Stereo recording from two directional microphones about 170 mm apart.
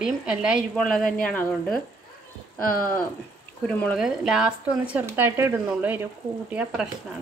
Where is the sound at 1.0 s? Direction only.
55° left (ahead or behind).